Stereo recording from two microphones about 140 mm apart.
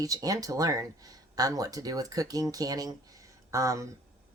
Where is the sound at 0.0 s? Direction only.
25° right (ahead or behind).